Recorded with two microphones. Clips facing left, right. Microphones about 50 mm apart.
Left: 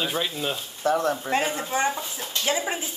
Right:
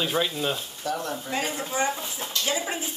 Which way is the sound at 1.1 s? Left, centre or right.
Left.